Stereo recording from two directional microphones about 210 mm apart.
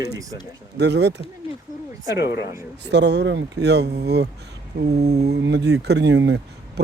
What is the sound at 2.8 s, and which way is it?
Speech, 55° right (ahead or behind).